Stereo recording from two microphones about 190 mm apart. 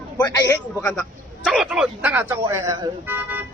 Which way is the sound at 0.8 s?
5° left (ahead or behind).